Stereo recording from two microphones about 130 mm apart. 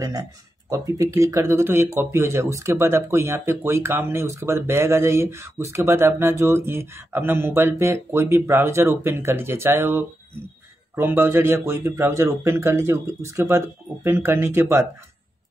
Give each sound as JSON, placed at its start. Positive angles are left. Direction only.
{"t": 0.7, "sound": "speech", "side_deg": -25}